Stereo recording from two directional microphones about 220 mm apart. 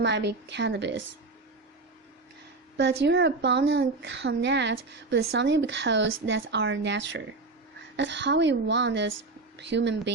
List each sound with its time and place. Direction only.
0.0 s a woman's voice: 55° right (ahead or behind)
2.7 s a woman's voice: 55° right (ahead or behind)